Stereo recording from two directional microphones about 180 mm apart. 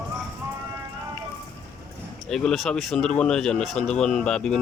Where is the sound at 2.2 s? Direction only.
Centre (ahead or behind).